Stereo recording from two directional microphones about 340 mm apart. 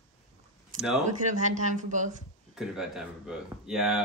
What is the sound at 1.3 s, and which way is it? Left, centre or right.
Speech, right.